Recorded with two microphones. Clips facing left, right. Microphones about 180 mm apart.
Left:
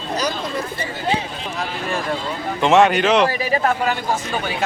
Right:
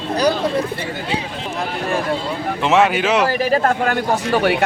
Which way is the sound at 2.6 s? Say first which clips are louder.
Left 2 dB; 5° right (ahead or behind).